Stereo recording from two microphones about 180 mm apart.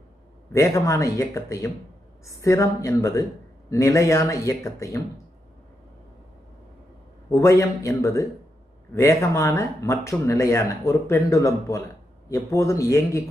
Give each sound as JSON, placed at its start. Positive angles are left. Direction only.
{"t": 0.5, "sound": "speech", "side_deg": 15}
{"t": 7.2, "sound": "speech", "side_deg": 15}